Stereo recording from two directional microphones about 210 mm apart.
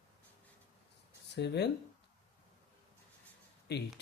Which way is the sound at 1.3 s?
55° left (ahead or behind).